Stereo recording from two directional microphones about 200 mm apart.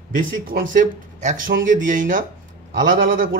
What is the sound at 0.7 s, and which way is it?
Speech, 40° right (ahead or behind).